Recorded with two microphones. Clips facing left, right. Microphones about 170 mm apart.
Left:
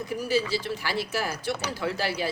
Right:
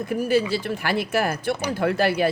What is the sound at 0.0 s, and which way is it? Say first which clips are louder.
Speech: right 5 dB; 55° right (ahead or behind).